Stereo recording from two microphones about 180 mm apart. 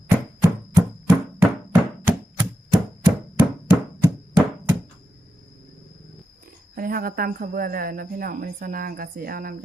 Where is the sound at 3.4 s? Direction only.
10° right (ahead or behind).